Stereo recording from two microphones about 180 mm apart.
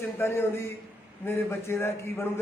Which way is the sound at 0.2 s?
15° left (ahead or behind).